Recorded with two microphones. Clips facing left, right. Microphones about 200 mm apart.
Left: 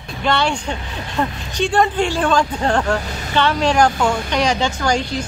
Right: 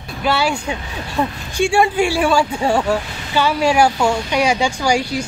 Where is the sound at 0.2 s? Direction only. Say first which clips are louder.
Right 1 dB; 5° right (ahead or behind).